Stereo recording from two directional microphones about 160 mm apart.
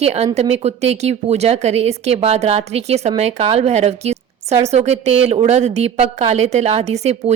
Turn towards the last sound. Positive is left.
turn(degrees=-45)  # may be behind; listen again after turning